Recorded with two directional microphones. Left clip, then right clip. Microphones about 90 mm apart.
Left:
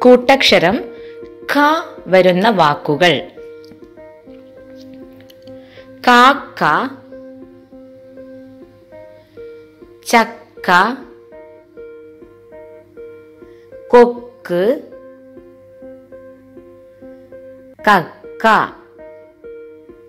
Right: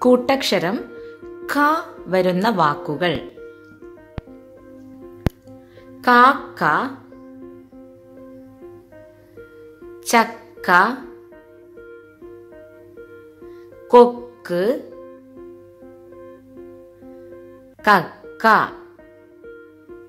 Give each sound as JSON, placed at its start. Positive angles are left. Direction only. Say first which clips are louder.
{"t": 0.0, "sound": "a woman's voice", "louder": "left 8 dB", "side_deg": 10}
{"t": 0.7, "sound": "speech", "louder": "left 6 dB", "side_deg": 0}
{"t": 5.9, "sound": "speech", "louder": "left 4 dB", "side_deg": 0}
{"t": 6.6, "sound": "a woman's voice", "louder": "left 4 dB", "side_deg": 15}
{"t": 10.0, "sound": "a woman's voice", "louder": "left 4 dB", "side_deg": 0}
{"t": 13.8, "sound": "speech", "louder": "left 2 dB", "side_deg": -5}
{"t": 14.4, "sound": "speech", "louder": "left 5 dB", "side_deg": 15}
{"t": 17.8, "sound": "music", "louder": "left 3 dB", "side_deg": 10}